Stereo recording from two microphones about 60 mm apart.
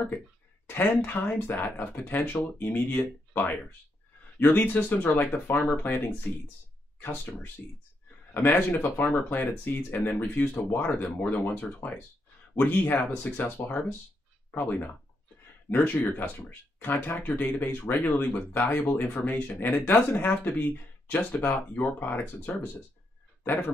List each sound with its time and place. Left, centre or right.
0.7 s speech: left